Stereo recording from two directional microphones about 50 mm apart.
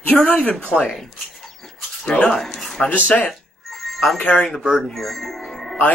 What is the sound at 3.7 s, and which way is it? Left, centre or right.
Music, centre.